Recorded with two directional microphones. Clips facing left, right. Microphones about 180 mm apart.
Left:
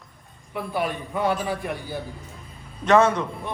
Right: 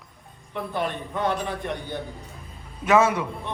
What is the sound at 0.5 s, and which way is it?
A man's voice, 10° left (ahead or behind).